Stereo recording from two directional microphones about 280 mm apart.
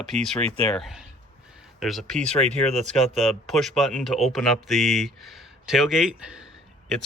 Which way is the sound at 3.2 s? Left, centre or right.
Centre.